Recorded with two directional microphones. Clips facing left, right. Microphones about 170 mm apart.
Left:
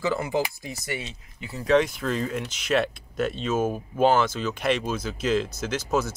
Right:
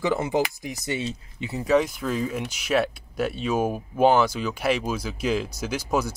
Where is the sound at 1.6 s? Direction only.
5° right (ahead or behind).